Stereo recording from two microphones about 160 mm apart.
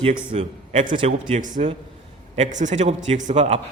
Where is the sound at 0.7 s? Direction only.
55° right (ahead or behind).